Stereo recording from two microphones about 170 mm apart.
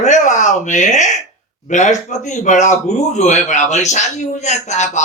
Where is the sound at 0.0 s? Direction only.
45° left (ahead or behind).